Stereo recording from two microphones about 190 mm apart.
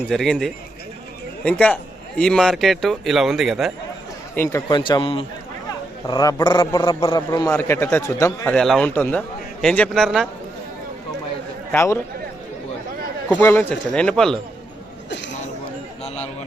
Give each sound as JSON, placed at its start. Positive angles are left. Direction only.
{"t": 0.0, "sound": "a man's voice", "side_deg": 5}
{"t": 4.4, "sound": "speech", "side_deg": 15}
{"t": 8.5, "sound": "a man's voice", "side_deg": 5}
{"t": 11.7, "sound": "speech", "side_deg": 15}
{"t": 13.2, "sound": "speech", "side_deg": 10}
{"t": 16.0, "sound": "a sound", "side_deg": 35}